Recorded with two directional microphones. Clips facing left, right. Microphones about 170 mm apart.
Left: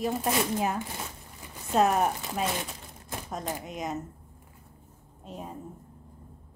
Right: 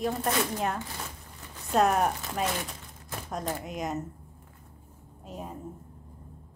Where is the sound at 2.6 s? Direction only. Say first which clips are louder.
Even; 15° left (ahead or behind).